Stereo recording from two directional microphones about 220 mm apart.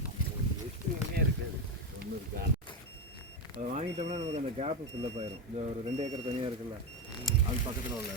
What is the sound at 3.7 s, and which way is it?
Speech, 30° right (ahead or behind).